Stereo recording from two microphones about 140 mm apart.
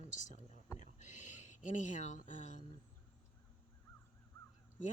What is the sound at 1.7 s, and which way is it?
Speech, 65° left (ahead or behind).